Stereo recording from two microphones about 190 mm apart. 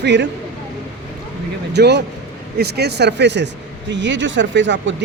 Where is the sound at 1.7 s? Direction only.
60° right (ahead or behind).